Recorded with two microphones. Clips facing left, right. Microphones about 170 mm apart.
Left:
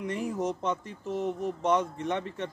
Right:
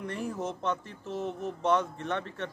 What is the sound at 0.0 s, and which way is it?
Speech, 15° left (ahead or behind).